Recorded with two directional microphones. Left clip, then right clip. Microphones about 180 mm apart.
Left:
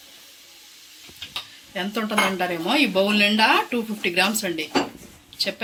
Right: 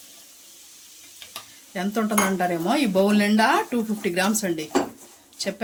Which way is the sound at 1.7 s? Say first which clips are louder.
Right 1 dB; 40° right (ahead or behind).